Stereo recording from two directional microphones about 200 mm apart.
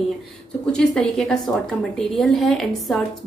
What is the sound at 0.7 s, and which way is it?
Speech, 5° left (ahead or behind).